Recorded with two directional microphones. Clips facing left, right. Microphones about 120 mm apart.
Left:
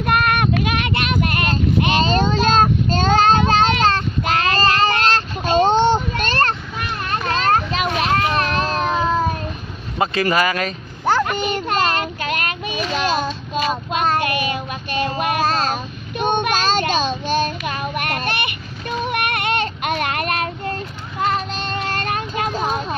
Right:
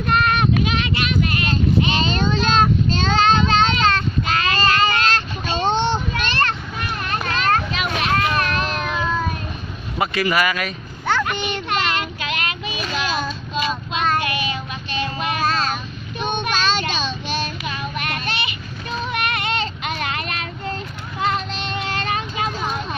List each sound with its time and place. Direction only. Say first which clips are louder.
0.0 s child singing: left 1 dB; 60° left (ahead or behind)
2.0 s child singing: left 3 dB; 40° left (ahead or behind)
7.1 s children playing: left 2 dB; 35° left (ahead or behind)
10.3 s a sound: left 2 dB; 30° left (ahead or behind); by 15.3 s 50° left (ahead or behind)
15.4 s child singing: left 2 dB; 35° left (ahead or behind)
16.2 s child singing: left 4 dB; 50° left (ahead or behind)